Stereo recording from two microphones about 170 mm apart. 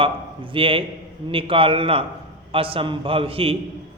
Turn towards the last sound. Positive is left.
turn(degrees=-35)  # may be behind; listen again after turning